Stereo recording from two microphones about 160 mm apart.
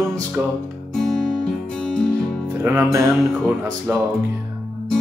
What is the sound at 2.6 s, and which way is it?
Music, 15° right (ahead or behind).